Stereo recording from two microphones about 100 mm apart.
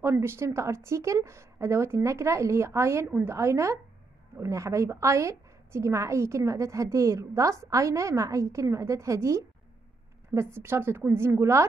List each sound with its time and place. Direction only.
0.0 s a woman's voice: 25° right (ahead or behind)